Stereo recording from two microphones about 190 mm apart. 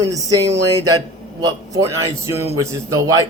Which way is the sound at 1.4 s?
20° right (ahead or behind).